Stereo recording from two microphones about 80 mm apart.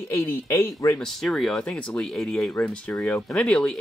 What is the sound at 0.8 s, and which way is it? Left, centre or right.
Speech, left.